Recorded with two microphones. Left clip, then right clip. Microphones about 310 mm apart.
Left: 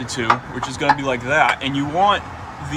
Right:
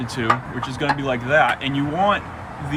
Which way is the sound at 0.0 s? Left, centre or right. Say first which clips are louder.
Left 2 dB; centre.